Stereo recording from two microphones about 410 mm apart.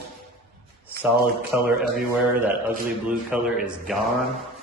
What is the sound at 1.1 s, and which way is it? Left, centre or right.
Speech, right.